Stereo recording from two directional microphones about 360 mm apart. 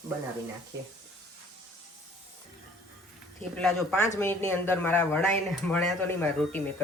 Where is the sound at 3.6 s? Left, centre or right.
Centre.